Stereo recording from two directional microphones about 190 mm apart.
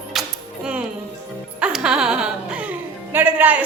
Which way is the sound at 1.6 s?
5° right (ahead or behind).